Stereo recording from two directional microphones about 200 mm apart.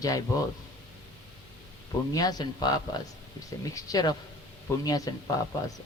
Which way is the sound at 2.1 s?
20° left (ahead or behind).